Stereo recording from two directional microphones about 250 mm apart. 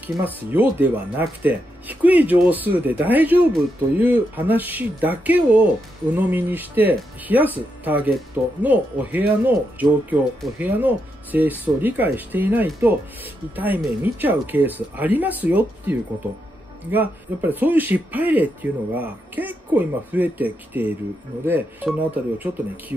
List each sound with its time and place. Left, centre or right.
0.0 s speech: centre